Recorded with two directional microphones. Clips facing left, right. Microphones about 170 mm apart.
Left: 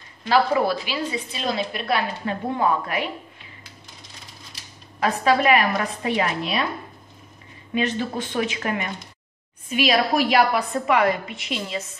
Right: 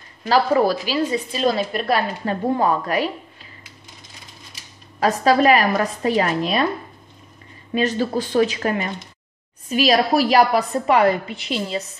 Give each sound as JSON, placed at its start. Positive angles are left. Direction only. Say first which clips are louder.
{"t": 0.3, "sound": "a woman's voice", "louder": "right 3 dB", "side_deg": -40}
{"t": 5.0, "sound": "a woman's voice", "louder": "right 4 dB", "side_deg": -40}
{"t": 7.7, "sound": "a woman's voice", "louder": "right 4 dB", "side_deg": -35}